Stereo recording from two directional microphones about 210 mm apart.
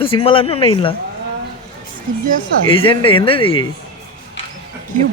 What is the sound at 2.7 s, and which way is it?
Speech, 25° left (ahead or behind).